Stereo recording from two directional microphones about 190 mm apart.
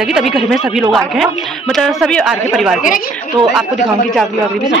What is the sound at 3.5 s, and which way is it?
Speech, 5° right (ahead or behind).